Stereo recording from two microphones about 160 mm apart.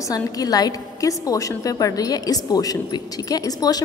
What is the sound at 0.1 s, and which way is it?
A woman's voice, 25° left (ahead or behind).